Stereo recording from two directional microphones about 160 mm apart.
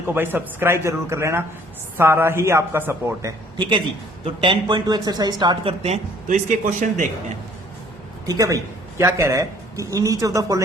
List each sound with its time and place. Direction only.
0.1 s a man's voice: 10° right (ahead or behind)
5.8 s speech: 45° right (ahead or behind)
8.3 s speech: 20° right (ahead or behind)